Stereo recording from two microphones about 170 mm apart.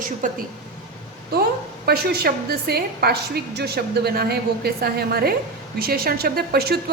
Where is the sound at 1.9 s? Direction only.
70° right (ahead or behind).